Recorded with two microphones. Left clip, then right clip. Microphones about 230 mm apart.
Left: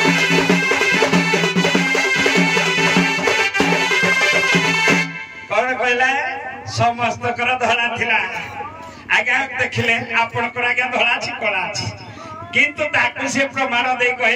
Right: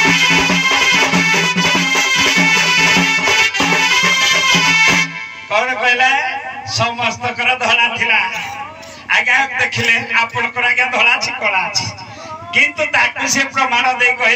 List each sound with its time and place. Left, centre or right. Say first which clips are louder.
0.0 s music: right 4 dB; centre
9.1 s a man's voice: right 4 dB; centre